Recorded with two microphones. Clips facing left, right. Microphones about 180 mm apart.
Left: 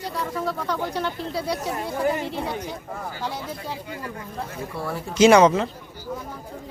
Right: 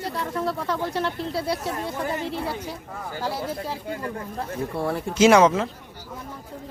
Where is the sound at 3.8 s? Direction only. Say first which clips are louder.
Right 4 dB; 45° right (ahead or behind).